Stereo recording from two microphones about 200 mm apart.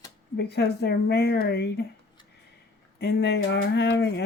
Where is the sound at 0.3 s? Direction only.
55° left (ahead or behind).